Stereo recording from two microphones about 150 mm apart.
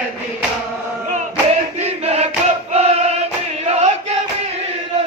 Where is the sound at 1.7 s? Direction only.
45° right (ahead or behind).